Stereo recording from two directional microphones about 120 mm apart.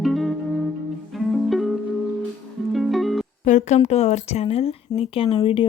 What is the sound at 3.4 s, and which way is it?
A woman's voice, 90° left.